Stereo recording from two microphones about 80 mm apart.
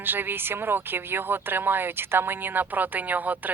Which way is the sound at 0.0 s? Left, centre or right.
Right.